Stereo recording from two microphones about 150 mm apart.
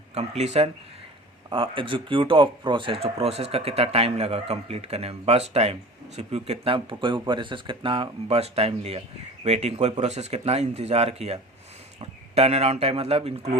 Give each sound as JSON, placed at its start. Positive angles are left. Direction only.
{"t": 0.1, "sound": "speech", "side_deg": -45}
{"t": 1.5, "sound": "speech", "side_deg": -35}